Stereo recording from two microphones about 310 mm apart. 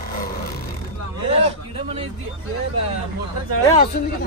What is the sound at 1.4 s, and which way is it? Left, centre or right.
Speech, centre.